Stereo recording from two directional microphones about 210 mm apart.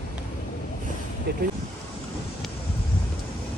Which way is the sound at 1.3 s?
50° right (ahead or behind).